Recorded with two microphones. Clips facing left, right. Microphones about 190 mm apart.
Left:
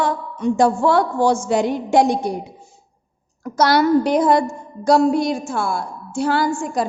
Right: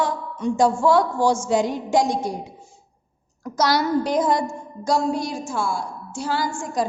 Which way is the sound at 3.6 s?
60° left (ahead or behind).